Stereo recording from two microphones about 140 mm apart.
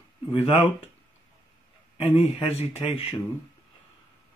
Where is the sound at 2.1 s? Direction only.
50° left (ahead or behind).